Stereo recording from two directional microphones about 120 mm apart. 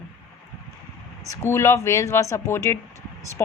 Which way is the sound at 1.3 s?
25° left (ahead or behind).